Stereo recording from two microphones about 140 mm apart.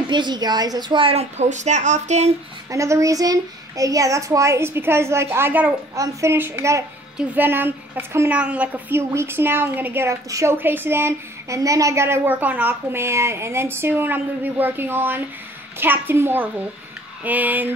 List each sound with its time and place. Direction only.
0.1 s a woman's voice: 30° right (ahead or behind); by 2.3 s 55° right (ahead or behind)
2.7 s a child's voice: 20° right (ahead or behind)